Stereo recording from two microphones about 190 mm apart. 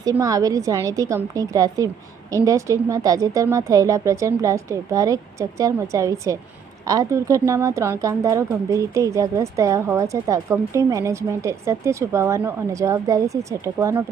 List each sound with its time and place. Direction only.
0.0 s speech: 15° right (ahead or behind)